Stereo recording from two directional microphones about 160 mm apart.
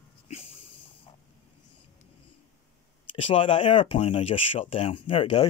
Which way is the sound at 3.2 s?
35° left (ahead or behind).